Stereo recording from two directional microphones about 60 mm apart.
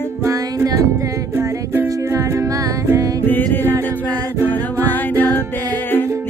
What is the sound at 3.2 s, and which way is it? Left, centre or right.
Music, left.